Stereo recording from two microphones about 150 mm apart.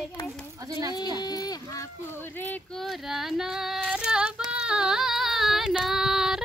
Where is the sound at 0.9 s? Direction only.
25° left (ahead or behind).